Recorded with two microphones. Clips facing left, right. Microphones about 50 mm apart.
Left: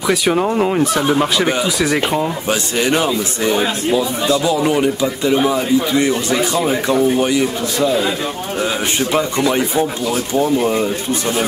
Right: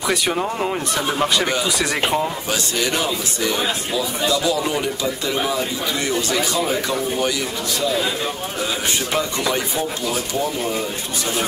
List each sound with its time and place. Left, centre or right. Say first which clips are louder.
0.0 s speech: left 4 dB; centre
0.3 s speech: left 6 dB; centre
2.8 s speech: left 7 dB; left
9.1 s speech: left 6 dB; centre